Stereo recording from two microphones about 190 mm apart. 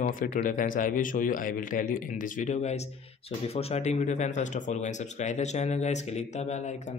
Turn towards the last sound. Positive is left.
turn(degrees=35)  # may be behind; listen again after turning